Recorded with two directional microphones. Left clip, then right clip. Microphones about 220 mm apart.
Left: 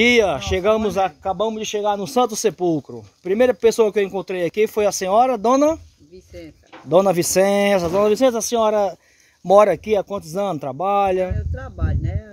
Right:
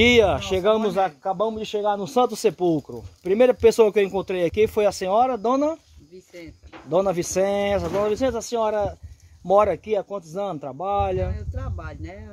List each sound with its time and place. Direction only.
0.0 s speech: 5° left (ahead or behind); by 5.8 s 40° left (ahead or behind)
6.9 s speech: 45° left (ahead or behind)
11.5 s speech: 10° left (ahead or behind)